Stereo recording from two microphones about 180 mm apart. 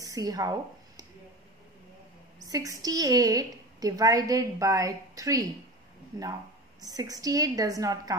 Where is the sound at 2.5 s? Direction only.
20° right (ahead or behind).